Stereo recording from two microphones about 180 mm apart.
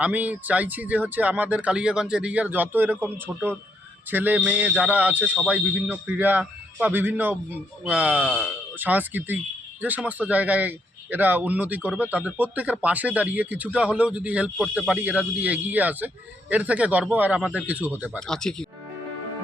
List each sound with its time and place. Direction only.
0.0 s speech: 10° right (ahead or behind)
18.2 s speech: 5° left (ahead or behind)